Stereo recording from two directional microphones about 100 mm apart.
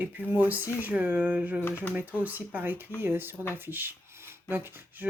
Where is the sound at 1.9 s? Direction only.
15° right (ahead or behind).